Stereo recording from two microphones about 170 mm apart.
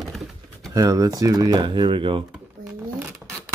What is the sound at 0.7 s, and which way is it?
Speech, 20° right (ahead or behind).